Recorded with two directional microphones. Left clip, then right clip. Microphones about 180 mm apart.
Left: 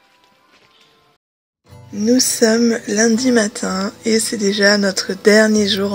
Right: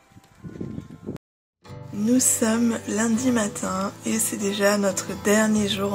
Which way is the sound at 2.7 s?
25° left (ahead or behind).